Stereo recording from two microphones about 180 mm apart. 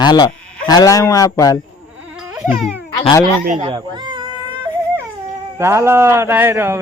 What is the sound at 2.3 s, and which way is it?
Baby cry, centre (ahead or behind).